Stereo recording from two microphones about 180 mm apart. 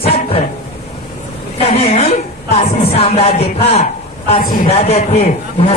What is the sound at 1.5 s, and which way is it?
A man's voice, 35° left (ahead or behind).